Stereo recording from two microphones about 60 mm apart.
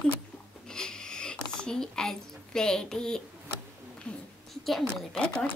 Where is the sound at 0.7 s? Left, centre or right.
Centre.